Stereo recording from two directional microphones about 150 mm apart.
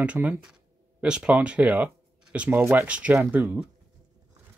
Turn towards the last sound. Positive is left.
turn(degrees=-15)  # may be behind; listen again after turning